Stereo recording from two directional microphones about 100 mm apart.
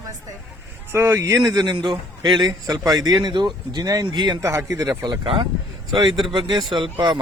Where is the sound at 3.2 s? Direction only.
50° right (ahead or behind).